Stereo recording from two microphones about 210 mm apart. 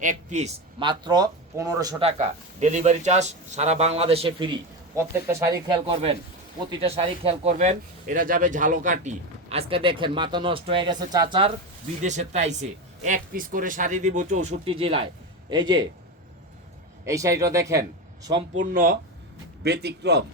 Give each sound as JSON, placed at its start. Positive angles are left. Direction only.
{"t": 0.0, "sound": "speech", "side_deg": -35}
{"t": 4.9, "sound": "speech", "side_deg": -15}
{"t": 12.0, "sound": "speech", "side_deg": -35}
{"t": 17.1, "sound": "speech", "side_deg": -15}
{"t": 18.5, "sound": "a man's voice", "side_deg": -40}